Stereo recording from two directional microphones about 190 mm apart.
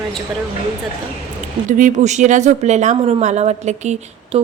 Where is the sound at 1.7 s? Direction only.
40° right (ahead or behind).